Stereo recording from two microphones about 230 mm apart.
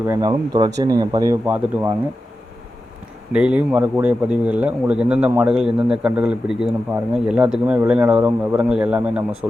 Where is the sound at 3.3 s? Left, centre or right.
Centre.